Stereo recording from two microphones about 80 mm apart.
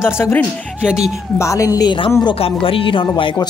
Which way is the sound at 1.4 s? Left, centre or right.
Left.